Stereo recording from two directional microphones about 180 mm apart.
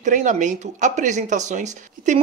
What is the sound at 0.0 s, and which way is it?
Speech, 45° right (ahead or behind).